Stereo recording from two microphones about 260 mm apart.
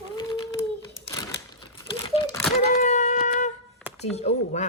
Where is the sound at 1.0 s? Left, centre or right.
Centre.